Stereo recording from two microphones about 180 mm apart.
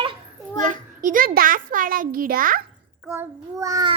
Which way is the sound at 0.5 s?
45° right (ahead or behind).